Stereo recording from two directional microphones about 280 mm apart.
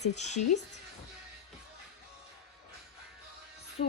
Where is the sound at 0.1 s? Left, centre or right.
Left.